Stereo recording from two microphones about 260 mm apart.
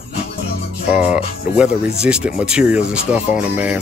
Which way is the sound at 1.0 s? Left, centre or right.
Centre.